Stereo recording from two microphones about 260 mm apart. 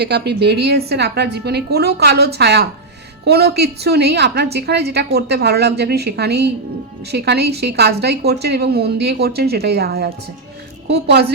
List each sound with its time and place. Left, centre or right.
0.0 s a woman's voice: right